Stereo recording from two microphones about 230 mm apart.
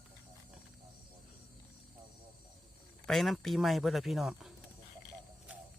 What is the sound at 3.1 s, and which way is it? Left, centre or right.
A man's voice, centre.